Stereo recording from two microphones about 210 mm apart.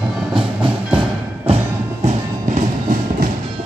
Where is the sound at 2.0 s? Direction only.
40° right (ahead or behind).